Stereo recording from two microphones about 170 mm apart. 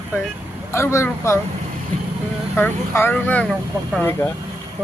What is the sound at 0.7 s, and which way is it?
Speech, 15° left (ahead or behind).